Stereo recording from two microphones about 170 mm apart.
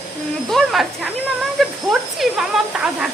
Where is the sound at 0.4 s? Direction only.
Centre (ahead or behind).